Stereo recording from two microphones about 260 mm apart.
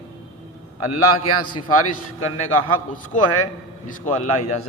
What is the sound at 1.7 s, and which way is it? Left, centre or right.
Speech, left.